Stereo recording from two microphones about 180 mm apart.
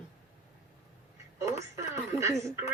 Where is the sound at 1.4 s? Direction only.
15° right (ahead or behind).